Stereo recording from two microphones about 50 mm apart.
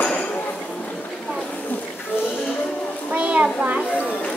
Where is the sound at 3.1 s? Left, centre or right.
Right.